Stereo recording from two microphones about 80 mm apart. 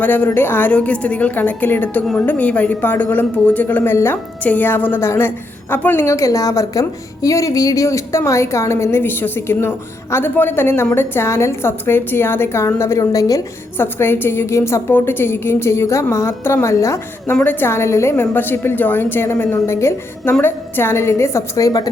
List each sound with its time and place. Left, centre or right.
0.0 s a woman's voice: left
0.7 s a woman's voice: centre
6.1 s speech: left
13.0 s a woman's voice: left
13.7 s speech: left
17.4 s a woman's voice: left